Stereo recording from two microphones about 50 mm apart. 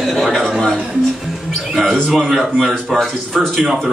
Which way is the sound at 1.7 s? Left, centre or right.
Centre.